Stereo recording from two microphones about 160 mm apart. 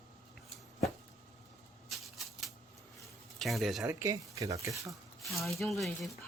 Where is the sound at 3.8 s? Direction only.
20° right (ahead or behind).